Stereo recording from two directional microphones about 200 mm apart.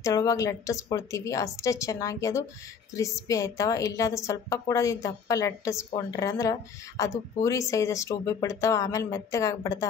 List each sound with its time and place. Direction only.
0.0 s a woman's voice: 15° left (ahead or behind)